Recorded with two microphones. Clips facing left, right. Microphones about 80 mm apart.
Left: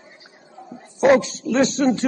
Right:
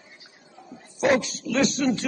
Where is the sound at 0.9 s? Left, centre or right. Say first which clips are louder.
Left 6 dB; left.